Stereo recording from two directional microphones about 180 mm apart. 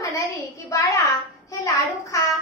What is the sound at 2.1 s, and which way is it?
Speech, 15° left (ahead or behind).